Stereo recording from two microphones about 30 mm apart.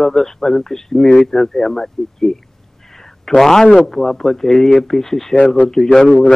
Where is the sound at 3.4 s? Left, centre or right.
Centre.